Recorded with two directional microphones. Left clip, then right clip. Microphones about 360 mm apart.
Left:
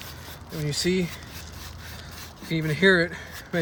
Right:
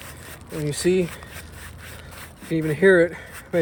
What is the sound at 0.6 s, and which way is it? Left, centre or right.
Speech, centre.